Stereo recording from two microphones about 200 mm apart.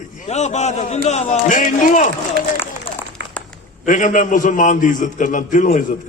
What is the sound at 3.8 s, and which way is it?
A man's voice, 40° left (ahead or behind).